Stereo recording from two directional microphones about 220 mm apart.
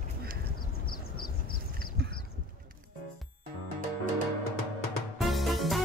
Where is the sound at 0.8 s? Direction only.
45° left (ahead or behind).